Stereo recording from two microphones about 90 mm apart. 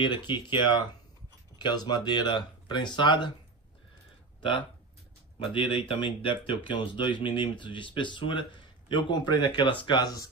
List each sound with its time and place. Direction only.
0.0 s speech: 60° left (ahead or behind)
4.4 s speech: 65° left (ahead or behind)
10.0 s speech: 45° left (ahead or behind)